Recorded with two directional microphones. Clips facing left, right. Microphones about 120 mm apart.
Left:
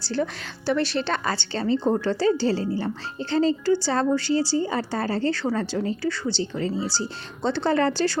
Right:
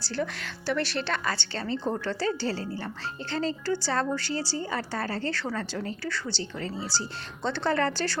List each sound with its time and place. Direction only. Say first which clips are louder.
0.2 s a woman's voice: left 4 dB; 35° left (ahead or behind)
0.7 s speech: left 5 dB; 20° left (ahead or behind)